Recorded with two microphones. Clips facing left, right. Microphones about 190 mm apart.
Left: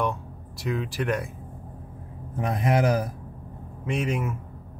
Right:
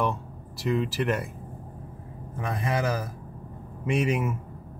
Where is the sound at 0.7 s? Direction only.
Centre (ahead or behind).